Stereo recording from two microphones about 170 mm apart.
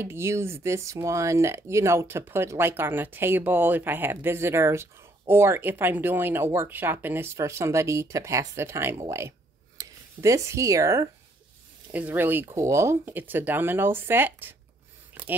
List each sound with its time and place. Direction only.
0.0 s speech: 15° right (ahead or behind)